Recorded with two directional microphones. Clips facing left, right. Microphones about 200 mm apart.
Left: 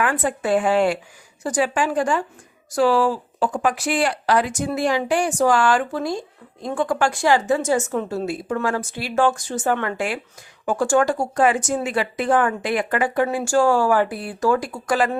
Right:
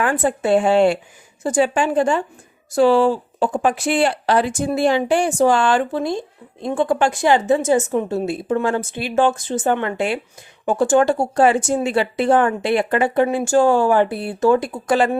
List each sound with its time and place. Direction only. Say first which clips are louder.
0.0 s speech: right 3 dB; 30° right (ahead or behind)